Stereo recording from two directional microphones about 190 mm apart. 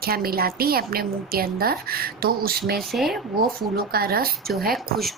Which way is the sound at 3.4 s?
55° right (ahead or behind).